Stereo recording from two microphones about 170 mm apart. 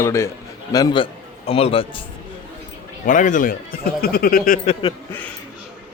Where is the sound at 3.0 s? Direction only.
50° left (ahead or behind).